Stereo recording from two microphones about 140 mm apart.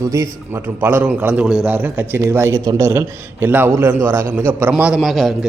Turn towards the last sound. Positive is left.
turn(degrees=0)  # may be behind; listen again after turning